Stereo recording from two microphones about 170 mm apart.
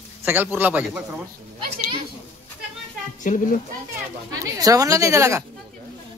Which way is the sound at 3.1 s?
50° left (ahead or behind).